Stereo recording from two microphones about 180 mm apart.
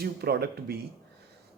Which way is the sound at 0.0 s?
60° right (ahead or behind).